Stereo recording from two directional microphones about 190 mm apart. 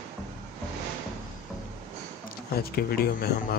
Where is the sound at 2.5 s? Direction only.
55° left (ahead or behind).